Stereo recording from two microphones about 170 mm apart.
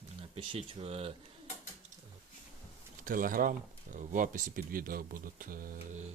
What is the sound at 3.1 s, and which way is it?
Speech, 55° right (ahead or behind).